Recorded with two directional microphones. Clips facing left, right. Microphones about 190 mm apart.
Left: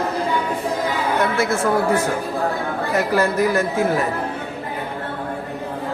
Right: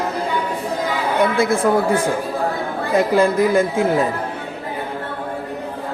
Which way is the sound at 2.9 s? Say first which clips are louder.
Right 4 dB; 15° right (ahead or behind).